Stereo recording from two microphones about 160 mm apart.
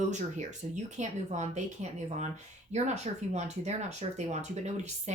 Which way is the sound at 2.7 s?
45° right (ahead or behind).